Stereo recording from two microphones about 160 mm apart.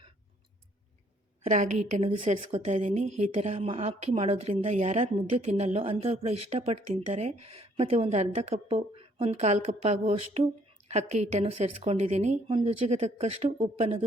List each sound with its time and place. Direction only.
1.5 s a woman's voice: 50° right (ahead or behind)
2.0 s speech: 35° right (ahead or behind)
2.3 s a woman's voice: 45° right (ahead or behind)